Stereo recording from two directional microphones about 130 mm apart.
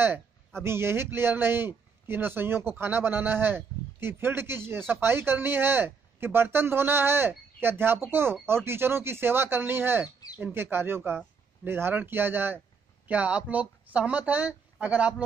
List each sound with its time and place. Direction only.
0.7 s a man's voice: 20° right (ahead or behind)